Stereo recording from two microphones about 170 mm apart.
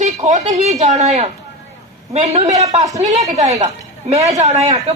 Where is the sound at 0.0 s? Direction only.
45° right (ahead or behind).